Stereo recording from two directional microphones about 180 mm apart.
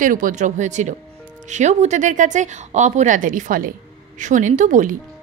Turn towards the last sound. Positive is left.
turn(degrees=-45)  # may be behind; listen again after turning